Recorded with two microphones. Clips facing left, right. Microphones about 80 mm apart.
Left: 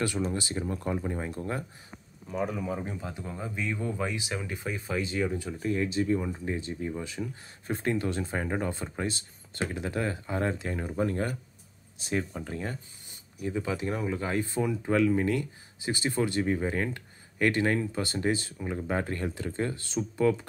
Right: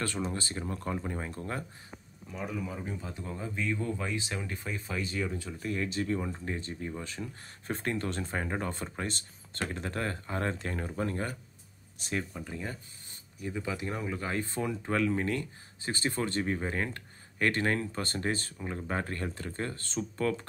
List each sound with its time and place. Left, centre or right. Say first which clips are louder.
0.0 s speech: left 4 dB; centre
1.2 s speech: left 4 dB; left
3.0 s speech: left 2 dB; left
12.4 s speech: left 3 dB; left
13.4 s speech: left 4 dB; left
18.9 s speech: left 3 dB; left